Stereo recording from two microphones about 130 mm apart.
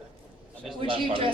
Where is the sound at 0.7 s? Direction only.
45° right (ahead or behind).